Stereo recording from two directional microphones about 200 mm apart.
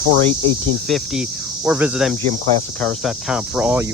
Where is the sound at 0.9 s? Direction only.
Centre (ahead or behind).